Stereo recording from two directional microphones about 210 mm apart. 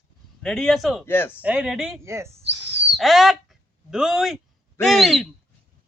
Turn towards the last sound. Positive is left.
turn(degrees=0)  # may be behind; listen again after turning